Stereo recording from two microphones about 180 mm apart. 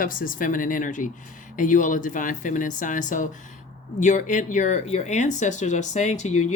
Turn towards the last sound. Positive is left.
turn(degrees=40)  # may be behind; listen again after turning